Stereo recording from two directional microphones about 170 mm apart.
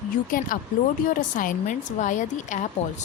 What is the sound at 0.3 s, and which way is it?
Speech, 55° left (ahead or behind).